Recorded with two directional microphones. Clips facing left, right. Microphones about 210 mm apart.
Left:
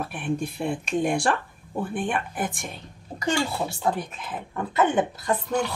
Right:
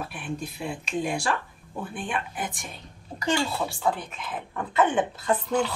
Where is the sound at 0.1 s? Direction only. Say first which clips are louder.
Left 6 dB; 50° left (ahead or behind).